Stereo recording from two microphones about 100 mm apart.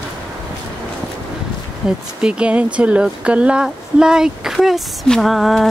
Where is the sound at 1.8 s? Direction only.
5° right (ahead or behind).